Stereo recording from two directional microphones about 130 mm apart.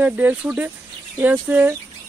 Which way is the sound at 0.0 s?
10° right (ahead or behind).